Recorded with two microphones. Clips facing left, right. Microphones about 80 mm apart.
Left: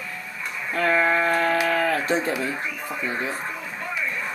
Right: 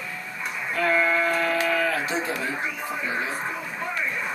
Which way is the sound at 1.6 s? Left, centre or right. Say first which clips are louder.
Left 2 dB; left.